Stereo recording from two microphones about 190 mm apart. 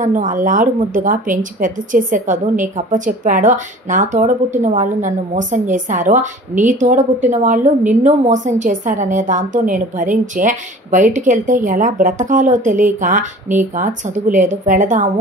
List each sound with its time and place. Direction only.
0.0 s a woman's voice: 40° right (ahead or behind)